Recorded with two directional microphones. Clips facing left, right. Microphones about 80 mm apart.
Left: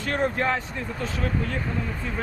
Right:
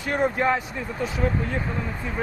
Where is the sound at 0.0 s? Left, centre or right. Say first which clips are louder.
Right 2 dB; centre.